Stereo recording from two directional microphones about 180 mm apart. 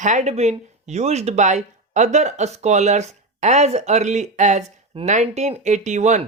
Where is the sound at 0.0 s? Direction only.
40° right (ahead or behind).